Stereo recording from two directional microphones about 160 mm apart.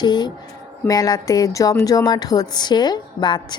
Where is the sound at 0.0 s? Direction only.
25° left (ahead or behind).